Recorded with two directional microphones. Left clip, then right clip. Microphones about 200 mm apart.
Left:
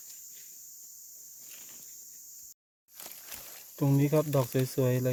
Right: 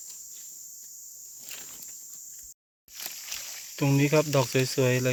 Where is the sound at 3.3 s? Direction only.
25° left (ahead or behind).